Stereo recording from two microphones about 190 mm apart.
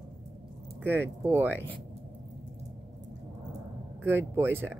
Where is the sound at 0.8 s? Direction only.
10° right (ahead or behind).